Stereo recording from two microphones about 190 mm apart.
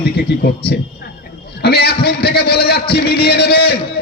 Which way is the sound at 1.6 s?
55° left (ahead or behind).